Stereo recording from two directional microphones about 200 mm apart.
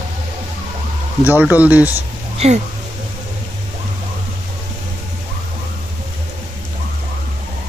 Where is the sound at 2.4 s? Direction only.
30° right (ahead or behind).